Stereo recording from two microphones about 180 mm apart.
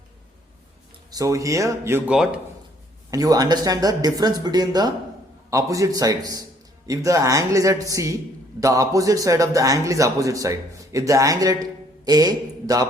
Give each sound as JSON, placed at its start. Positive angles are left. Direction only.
{"t": 1.1, "sound": "a man's voice", "side_deg": -20}
{"t": 3.1, "sound": "a man's voice", "side_deg": -20}